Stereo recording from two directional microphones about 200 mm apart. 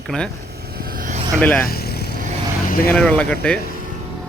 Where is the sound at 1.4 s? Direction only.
10° left (ahead or behind).